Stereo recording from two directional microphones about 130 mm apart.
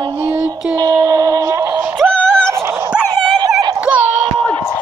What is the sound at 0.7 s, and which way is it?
Synthetic singing, 30° right (ahead or behind).